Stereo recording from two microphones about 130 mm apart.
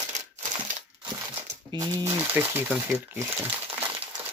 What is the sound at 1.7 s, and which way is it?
Speech, 25° right (ahead or behind).